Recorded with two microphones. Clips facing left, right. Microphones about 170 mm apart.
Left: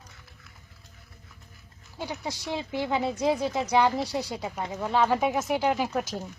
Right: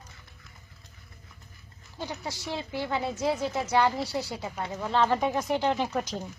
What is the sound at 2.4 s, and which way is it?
A woman's voice, 15° left (ahead or behind).